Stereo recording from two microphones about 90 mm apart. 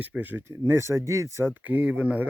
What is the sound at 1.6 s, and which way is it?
Speech, 15° right (ahead or behind).